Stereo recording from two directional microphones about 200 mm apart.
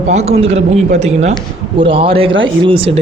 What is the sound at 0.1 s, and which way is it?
Speech, 30° right (ahead or behind).